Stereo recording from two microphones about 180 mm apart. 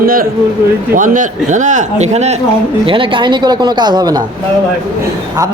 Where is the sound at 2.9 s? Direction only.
30° right (ahead or behind).